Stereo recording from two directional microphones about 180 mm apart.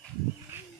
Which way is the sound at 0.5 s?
15° right (ahead or behind).